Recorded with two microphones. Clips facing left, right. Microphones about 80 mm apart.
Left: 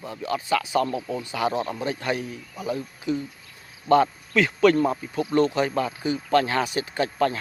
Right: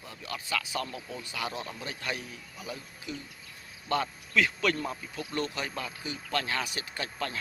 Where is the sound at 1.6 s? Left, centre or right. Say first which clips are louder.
Left 11 dB; left.